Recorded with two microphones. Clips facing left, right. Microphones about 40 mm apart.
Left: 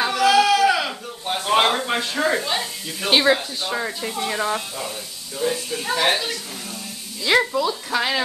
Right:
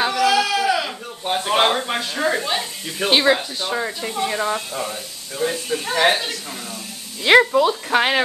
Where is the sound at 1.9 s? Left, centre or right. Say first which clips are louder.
Even; centre.